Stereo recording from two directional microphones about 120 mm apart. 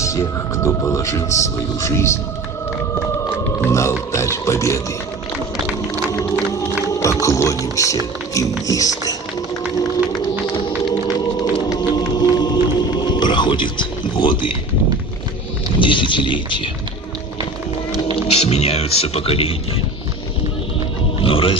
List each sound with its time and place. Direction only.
0.0 s speech: 25° left (ahead or behind)
3.6 s speech: 25° left (ahead or behind)
6.9 s speech: 25° left (ahead or behind)
10.9 s music: 35° left (ahead or behind)
15.8 s speech: 45° left (ahead or behind)
18.1 s speech: 60° left (ahead or behind)
21.2 s wild animals: 50° left (ahead or behind)